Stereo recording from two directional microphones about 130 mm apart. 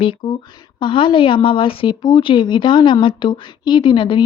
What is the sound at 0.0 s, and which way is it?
A woman's voice, 40° left (ahead or behind).